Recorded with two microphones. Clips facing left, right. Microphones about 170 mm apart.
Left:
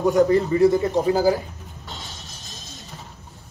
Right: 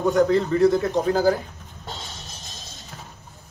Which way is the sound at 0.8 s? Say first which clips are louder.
Left 1 dB; 5° left (ahead or behind).